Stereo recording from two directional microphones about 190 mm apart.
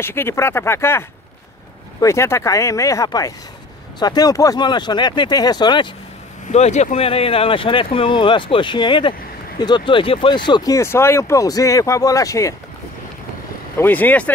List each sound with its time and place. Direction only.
0.0 s speech: 10° left (ahead or behind)
6.5 s speech: 35° left (ahead or behind); by 12.5 s 15° left (ahead or behind)
13.7 s speech: 10° left (ahead or behind)